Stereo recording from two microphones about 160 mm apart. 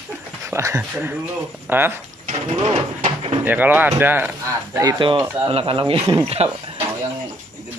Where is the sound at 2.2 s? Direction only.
45° right (ahead or behind).